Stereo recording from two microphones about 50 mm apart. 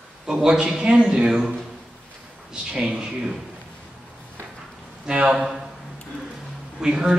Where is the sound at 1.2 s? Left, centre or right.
Centre.